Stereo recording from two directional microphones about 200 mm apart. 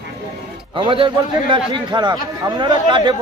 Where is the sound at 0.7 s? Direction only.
25° right (ahead or behind).